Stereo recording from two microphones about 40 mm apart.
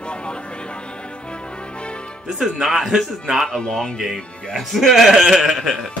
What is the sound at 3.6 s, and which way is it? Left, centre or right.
Speech, centre.